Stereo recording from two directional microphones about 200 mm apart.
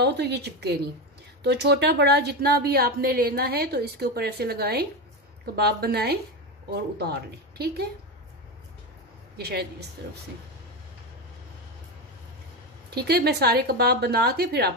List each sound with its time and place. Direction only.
0.0 s a woman's voice: 55° right (ahead or behind)
9.4 s a woman's voice: 50° right (ahead or behind)
12.9 s a woman's voice: 50° right (ahead or behind)